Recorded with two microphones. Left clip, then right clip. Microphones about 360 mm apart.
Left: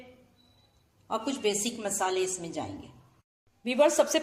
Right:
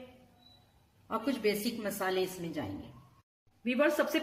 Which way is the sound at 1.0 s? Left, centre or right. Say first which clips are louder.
Left 4 dB; left.